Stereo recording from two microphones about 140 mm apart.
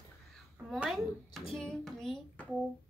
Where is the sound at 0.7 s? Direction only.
Centre (ahead or behind).